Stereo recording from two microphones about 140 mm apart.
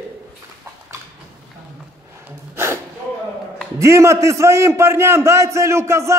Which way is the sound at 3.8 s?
20° right (ahead or behind).